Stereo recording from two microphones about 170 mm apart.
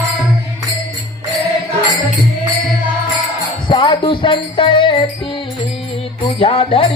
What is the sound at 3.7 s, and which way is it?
Music, 30° left (ahead or behind).